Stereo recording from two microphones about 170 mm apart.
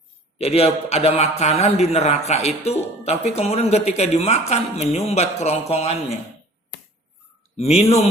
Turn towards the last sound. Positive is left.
turn(degrees=40)  # may be behind; listen again after turning